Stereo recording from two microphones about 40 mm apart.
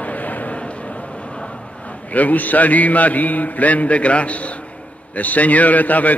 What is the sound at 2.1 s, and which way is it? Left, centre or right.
A man's voice, left.